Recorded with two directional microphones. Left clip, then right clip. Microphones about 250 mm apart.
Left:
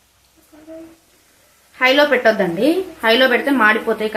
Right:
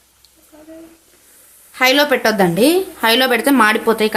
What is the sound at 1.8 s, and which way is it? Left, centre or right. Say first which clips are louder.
A woman's voice: even; right.